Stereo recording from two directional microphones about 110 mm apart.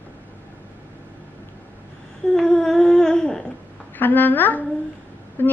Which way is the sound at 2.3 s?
5° left (ahead or behind).